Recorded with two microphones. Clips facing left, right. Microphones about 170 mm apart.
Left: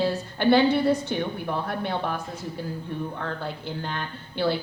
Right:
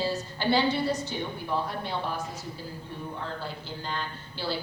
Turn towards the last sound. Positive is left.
turn(degrees=60)  # may be behind; listen again after turning